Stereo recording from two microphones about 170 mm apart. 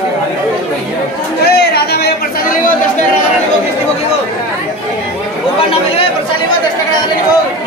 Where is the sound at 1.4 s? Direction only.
70° left (ahead or behind).